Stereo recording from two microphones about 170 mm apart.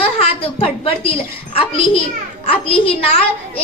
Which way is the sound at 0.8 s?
35° left (ahead or behind).